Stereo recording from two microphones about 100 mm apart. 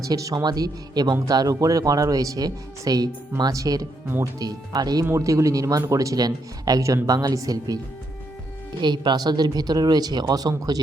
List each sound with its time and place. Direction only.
0.0 s speech: 35° right (ahead or behind)
5.0 s speech: 30° right (ahead or behind)
8.8 s speech: 50° right (ahead or behind)